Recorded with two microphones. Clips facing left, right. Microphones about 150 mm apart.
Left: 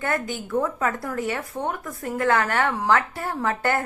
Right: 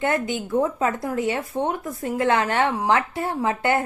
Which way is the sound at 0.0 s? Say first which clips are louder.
Right 4 dB; 20° right (ahead or behind).